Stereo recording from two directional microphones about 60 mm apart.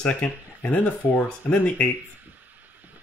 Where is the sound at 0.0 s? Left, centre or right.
Left.